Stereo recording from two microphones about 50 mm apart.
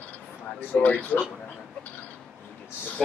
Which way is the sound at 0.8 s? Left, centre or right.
Left.